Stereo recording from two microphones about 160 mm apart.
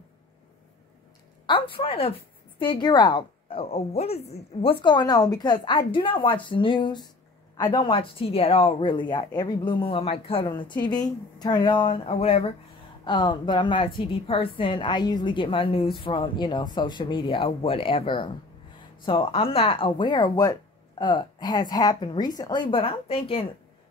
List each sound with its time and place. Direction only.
1.4 s a woman's voice: 30° left (ahead or behind)